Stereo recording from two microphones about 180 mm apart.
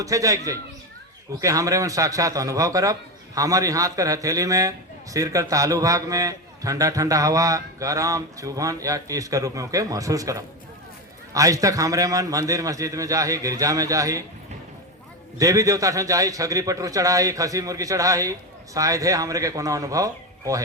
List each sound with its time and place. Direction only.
0.0 s a man's voice: 20° right (ahead or behind)
1.4 s a man's voice: 20° right (ahead or behind)
15.4 s a man's voice: 20° right (ahead or behind)